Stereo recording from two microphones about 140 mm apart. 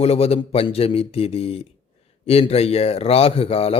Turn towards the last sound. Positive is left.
turn(degrees=45)  # may be behind; listen again after turning